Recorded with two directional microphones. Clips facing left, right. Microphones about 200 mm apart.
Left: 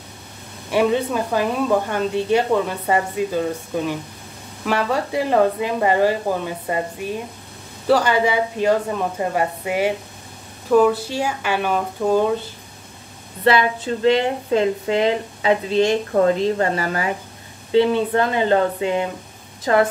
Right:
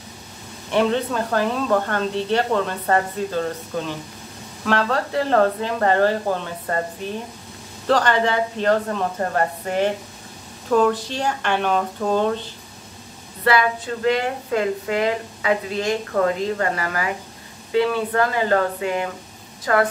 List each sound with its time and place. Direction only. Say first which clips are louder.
0.7 s speech: left 2 dB; 10° left (ahead or behind)
13.4 s speech: left 2 dB; 25° left (ahead or behind)